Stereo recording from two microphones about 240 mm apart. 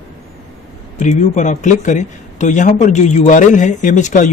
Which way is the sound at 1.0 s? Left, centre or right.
Left.